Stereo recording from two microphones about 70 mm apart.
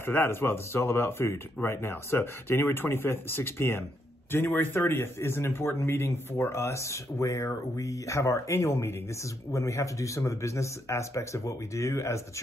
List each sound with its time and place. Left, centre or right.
0.0 s speech: left